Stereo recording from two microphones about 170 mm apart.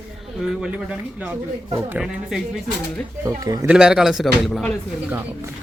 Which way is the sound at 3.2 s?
20° right (ahead or behind).